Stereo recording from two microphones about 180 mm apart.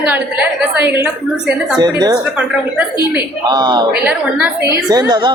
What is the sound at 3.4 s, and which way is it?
Speech, 25° right (ahead or behind).